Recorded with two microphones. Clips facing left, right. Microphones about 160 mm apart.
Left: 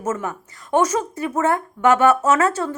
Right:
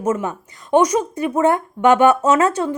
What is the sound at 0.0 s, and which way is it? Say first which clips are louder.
Speech: right 4 dB; 15° right (ahead or behind).